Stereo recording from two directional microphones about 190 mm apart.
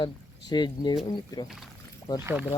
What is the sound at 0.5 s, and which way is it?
Speech, 20° left (ahead or behind).